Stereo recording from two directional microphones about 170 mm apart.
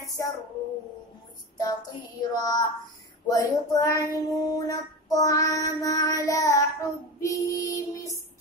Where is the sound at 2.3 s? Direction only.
25° left (ahead or behind).